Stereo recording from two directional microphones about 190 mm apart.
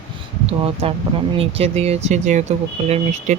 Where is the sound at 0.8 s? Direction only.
30° right (ahead or behind).